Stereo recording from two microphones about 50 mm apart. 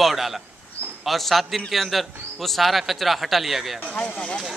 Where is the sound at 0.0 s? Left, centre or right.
Centre.